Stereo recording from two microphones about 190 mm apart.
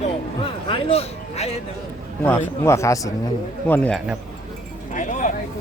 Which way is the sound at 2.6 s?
15° left (ahead or behind).